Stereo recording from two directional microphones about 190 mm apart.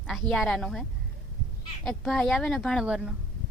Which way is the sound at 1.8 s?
5° left (ahead or behind).